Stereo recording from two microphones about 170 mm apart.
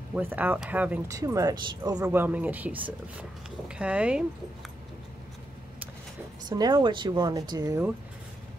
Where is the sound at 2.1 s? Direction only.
10° right (ahead or behind).